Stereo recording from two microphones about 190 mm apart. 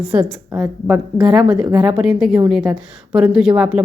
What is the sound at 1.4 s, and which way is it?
Speech, 15° right (ahead or behind).